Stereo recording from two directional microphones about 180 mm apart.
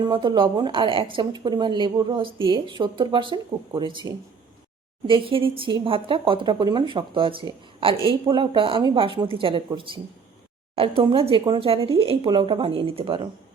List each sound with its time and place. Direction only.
0.1 s speech: 25° right (ahead or behind)